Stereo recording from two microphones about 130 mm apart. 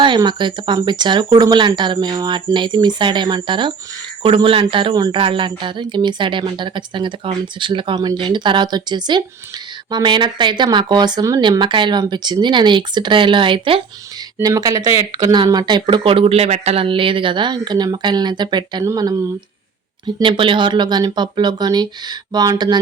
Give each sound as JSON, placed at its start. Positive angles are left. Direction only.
{"t": 0.0, "sound": "speech", "side_deg": -35}
{"t": 14.4, "sound": "speech", "side_deg": -30}
{"t": 20.2, "sound": "speech", "side_deg": -40}